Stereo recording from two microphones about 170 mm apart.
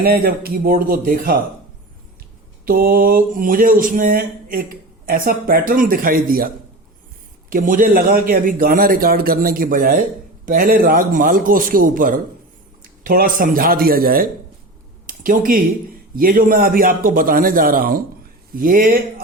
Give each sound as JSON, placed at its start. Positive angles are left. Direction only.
{"t": 0.0, "sound": "a man's voice", "side_deg": -60}
{"t": 2.6, "sound": "a man's voice", "side_deg": -60}
{"t": 7.5, "sound": "a man's voice", "side_deg": -50}
{"t": 15.0, "sound": "a sound", "side_deg": -55}
{"t": 16.1, "sound": "a man's voice", "side_deg": -55}